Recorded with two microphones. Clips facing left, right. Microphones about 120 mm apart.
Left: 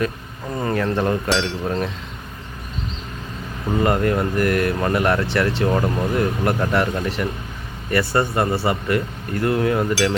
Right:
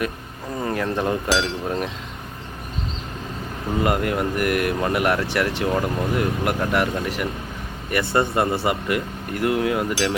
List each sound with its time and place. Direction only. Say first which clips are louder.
0.6 s chink: left 3 dB; 5° right (ahead or behind)
3.8 s speech: left 3 dB; 10° right (ahead or behind)